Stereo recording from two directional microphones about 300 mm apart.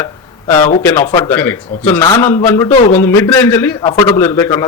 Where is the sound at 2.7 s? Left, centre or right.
Left.